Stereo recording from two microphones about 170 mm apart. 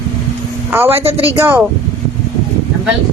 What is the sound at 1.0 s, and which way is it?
Speech, 35° right (ahead or behind).